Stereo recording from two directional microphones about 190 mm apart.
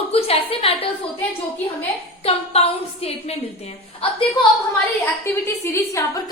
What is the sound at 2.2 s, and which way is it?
A woman's voice, 30° left (ahead or behind).